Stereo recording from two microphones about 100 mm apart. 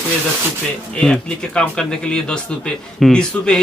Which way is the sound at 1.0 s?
5° left (ahead or behind).